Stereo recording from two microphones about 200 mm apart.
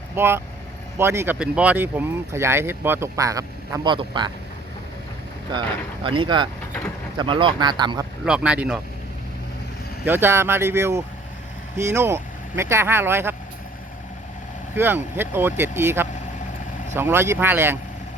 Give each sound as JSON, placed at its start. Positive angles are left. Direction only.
{"t": 0.2, "sound": "speech", "side_deg": -10}
{"t": 5.5, "sound": "speech", "side_deg": -25}
{"t": 8.2, "sound": "speech", "side_deg": -5}
{"t": 10.1, "sound": "speech", "side_deg": -10}
{"t": 14.8, "sound": "speech", "side_deg": -10}